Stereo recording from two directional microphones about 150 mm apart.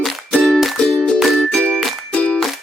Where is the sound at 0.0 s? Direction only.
Centre (ahead or behind).